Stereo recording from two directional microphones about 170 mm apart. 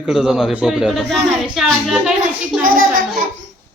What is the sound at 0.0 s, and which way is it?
Speech, 5° right (ahead or behind).